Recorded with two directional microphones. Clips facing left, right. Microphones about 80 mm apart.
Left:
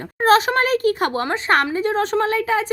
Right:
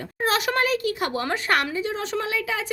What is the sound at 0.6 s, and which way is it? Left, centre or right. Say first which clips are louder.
Speech: left 6 dB; left.